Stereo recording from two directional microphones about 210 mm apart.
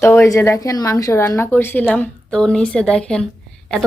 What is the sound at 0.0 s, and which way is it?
A woman's voice, 15° left (ahead or behind).